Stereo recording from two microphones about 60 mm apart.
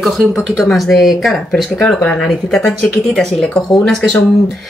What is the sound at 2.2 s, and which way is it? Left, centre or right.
Speech, centre.